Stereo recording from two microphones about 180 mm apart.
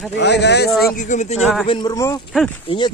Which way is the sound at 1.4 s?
Centre (ahead or behind).